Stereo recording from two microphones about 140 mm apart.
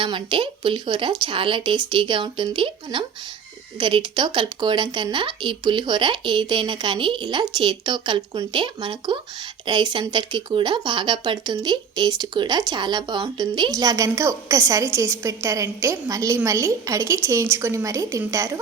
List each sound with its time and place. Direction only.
0.0 s a woman's voice: 35° right (ahead or behind); by 18.6 s 20° right (ahead or behind)